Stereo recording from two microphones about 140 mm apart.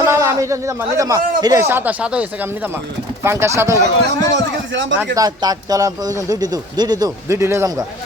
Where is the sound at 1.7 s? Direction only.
10° right (ahead or behind).